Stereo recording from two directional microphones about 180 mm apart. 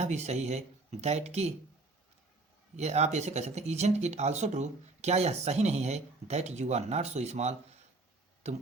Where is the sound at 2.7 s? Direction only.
40° right (ahead or behind).